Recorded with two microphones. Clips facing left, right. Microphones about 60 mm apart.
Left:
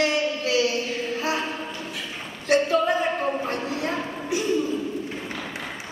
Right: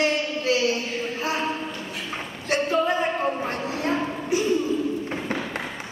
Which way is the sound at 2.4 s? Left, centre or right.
Right.